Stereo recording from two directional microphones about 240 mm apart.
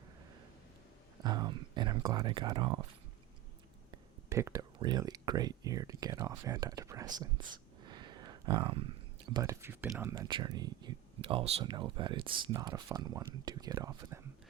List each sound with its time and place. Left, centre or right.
1.2 s speech: centre
3.9 s speech: centre